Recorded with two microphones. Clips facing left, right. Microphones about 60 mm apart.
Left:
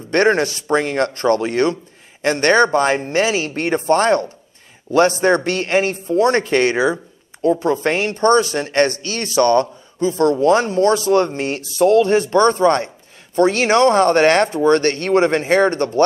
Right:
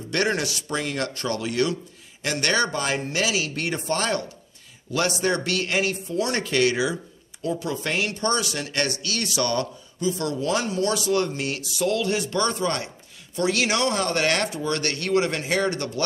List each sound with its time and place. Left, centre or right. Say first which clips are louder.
0.1 s speech: left 9 dB; left